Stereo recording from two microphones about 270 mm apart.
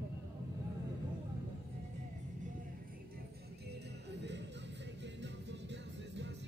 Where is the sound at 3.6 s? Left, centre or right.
Right.